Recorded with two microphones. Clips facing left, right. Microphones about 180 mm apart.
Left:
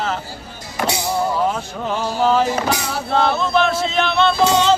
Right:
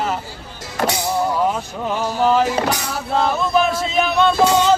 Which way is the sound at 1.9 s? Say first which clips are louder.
Even; 5° right (ahead or behind).